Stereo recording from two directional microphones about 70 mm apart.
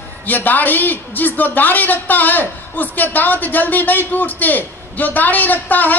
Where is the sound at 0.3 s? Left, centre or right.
Left.